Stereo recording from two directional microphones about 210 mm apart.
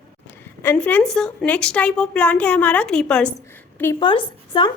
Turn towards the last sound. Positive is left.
turn(degrees=25)  # may be behind; listen again after turning